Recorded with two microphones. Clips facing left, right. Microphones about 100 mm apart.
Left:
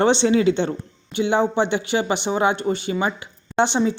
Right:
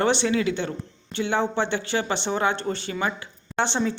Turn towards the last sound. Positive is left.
turn(degrees=15)  # may be behind; listen again after turning